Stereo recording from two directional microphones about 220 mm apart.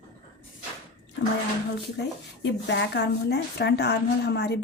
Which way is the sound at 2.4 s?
50° left (ahead or behind).